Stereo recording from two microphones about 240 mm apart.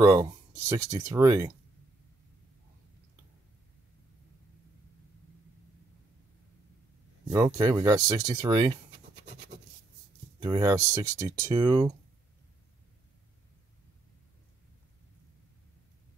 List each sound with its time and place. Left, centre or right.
0.0 s speech: centre
7.2 s speech: centre
10.4 s speech: centre